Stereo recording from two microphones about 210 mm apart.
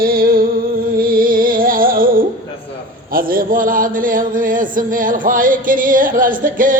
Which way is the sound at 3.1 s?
40° right (ahead or behind).